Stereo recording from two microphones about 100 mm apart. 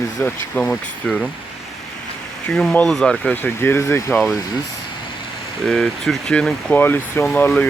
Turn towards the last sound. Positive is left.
turn(degrees=15)  # may be behind; listen again after turning